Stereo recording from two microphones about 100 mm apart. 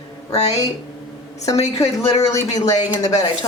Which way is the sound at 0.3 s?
90° left.